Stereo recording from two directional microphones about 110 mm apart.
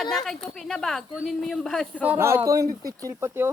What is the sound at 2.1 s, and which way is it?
Speech, 25° right (ahead or behind).